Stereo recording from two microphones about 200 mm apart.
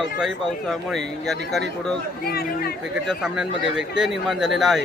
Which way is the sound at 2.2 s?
50° left (ahead or behind).